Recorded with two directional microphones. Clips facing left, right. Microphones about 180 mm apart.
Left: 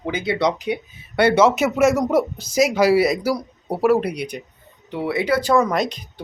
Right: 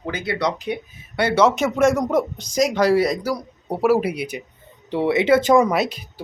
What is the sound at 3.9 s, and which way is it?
Speech, 5° right (ahead or behind).